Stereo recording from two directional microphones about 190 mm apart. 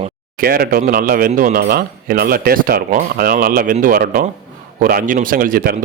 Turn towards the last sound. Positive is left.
turn(degrees=-50)  # may be behind; listen again after turning